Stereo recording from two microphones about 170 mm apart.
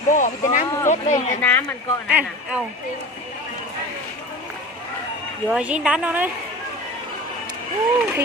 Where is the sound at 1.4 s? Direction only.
10° left (ahead or behind).